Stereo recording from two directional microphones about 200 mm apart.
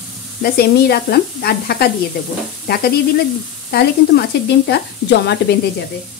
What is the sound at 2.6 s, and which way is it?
Stir, 50° left (ahead or behind).